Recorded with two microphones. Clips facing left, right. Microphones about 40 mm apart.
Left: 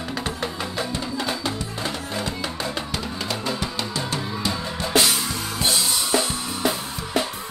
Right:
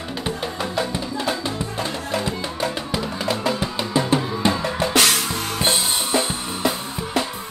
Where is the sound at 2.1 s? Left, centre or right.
Centre.